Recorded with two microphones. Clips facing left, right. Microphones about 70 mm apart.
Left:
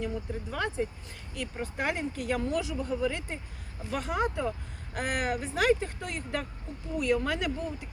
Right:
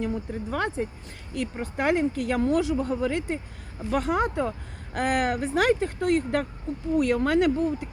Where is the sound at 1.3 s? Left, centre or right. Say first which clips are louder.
Right 5 dB; right.